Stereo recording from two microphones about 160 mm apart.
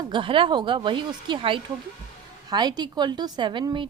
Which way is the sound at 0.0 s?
30° right (ahead or behind).